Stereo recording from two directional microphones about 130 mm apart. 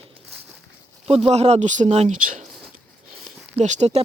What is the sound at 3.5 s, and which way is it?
Speech, 65° right (ahead or behind).